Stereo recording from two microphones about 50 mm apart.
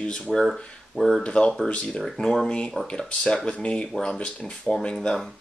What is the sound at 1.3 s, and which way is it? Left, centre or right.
Speech, centre.